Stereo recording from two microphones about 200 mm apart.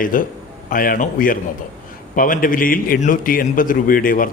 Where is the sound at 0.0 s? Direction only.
45° left (ahead or behind).